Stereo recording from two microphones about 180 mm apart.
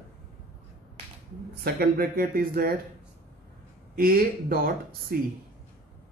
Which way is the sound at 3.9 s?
55° right (ahead or behind).